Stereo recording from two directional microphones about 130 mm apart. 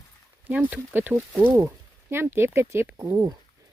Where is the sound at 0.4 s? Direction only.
15° right (ahead or behind).